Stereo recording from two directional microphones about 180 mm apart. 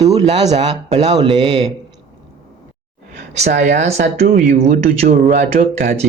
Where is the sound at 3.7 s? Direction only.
40° right (ahead or behind).